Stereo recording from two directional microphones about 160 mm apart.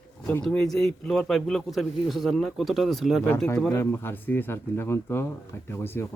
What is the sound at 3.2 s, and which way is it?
Speech, 10° left (ahead or behind).